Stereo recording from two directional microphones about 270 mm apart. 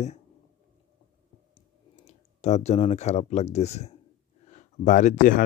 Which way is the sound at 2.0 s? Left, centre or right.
Left.